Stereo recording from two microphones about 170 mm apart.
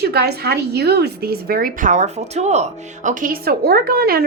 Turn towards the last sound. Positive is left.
turn(degrees=-65)  # may be behind; listen again after turning